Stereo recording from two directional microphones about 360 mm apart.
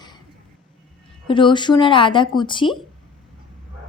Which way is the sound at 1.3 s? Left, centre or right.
Centre.